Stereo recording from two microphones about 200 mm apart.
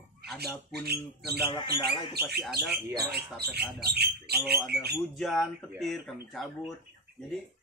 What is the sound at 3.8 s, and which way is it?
Speech, 50° right (ahead or behind).